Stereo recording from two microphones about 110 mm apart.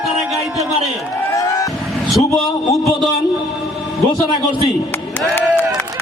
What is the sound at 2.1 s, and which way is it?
Speech, centre (ahead or behind).